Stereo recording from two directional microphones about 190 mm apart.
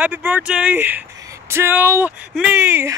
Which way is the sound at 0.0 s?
10° right (ahead or behind).